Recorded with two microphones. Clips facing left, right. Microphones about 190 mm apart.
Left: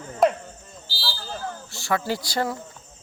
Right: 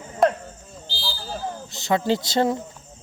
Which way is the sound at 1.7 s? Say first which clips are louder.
Right 4 dB; 20° right (ahead or behind).